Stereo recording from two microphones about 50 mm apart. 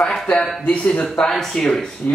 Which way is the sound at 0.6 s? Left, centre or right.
Left.